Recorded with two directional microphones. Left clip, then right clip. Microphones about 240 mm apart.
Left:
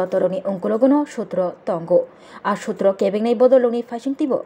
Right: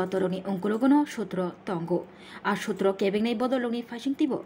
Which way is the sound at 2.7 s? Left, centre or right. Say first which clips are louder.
Left 9 dB; centre.